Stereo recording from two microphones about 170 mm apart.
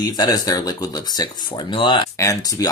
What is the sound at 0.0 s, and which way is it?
Speech, 20° left (ahead or behind).